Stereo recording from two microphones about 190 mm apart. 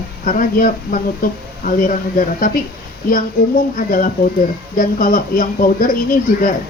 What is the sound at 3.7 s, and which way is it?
Speech, 45° left (ahead or behind).